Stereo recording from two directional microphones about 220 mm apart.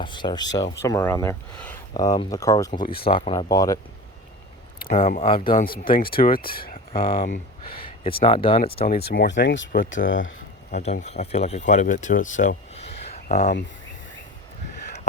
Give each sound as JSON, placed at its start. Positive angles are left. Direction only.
{"t": 0.0, "sound": "speech", "side_deg": 20}
{"t": 4.9, "sound": "speech", "side_deg": 25}
{"t": 5.5, "sound": "speech", "side_deg": 40}
{"t": 6.9, "sound": "speech", "side_deg": 25}
{"t": 9.0, "sound": "speech", "side_deg": 50}
{"t": 10.7, "sound": "speech", "side_deg": 35}